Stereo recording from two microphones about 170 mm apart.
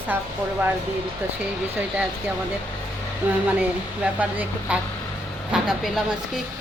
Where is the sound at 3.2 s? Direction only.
10° right (ahead or behind).